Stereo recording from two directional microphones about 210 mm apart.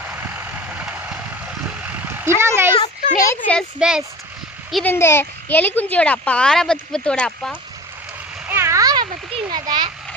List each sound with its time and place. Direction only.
0.8 s vehicle: 5° right (ahead or behind)
2.7 s a sound: 25° left (ahead or behind)
3.2 s a woman's voice: 5° left (ahead or behind)
3.8 s speech: 5° right (ahead or behind)
4.7 s speech: 10° left (ahead or behind)
8.4 s a sound: 10° right (ahead or behind)